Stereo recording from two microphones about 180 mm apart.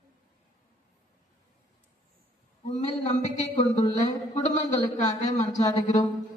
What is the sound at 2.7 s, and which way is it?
A man's voice, 40° left (ahead or behind).